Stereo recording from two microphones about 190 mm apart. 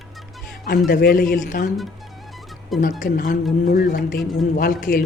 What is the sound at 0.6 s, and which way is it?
Speech, 50° left (ahead or behind).